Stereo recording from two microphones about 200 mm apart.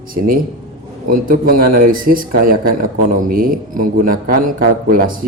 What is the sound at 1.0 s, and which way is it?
Speech, 45° right (ahead or behind).